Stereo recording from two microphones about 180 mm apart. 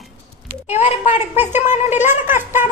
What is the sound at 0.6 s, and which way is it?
Speech, 35° left (ahead or behind).